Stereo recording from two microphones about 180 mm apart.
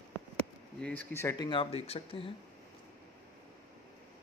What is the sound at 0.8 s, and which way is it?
Speech, 10° left (ahead or behind).